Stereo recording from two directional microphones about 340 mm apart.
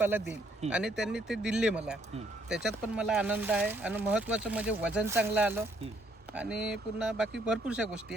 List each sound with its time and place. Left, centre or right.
0.0 s speech: centre